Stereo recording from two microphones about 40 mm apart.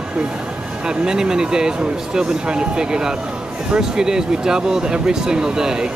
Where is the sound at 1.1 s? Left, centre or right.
Centre.